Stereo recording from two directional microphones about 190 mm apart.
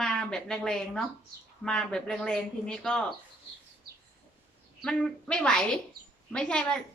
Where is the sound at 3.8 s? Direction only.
55° right (ahead or behind).